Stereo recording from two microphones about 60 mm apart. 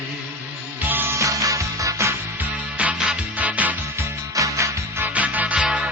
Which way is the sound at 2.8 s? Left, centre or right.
Right.